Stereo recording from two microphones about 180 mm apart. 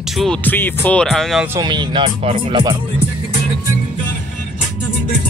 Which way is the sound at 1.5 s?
25° right (ahead or behind).